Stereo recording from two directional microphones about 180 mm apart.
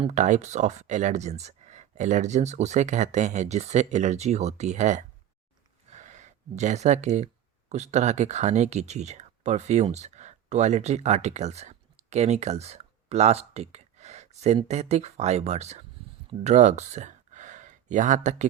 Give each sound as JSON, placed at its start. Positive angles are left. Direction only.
{"t": 0.1, "sound": "speech", "side_deg": -45}
{"t": 5.9, "sound": "a sound", "side_deg": -40}
{"t": 7.7, "sound": "speech", "side_deg": -40}